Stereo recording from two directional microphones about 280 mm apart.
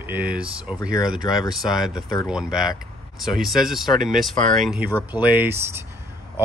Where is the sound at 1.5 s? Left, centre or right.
Centre.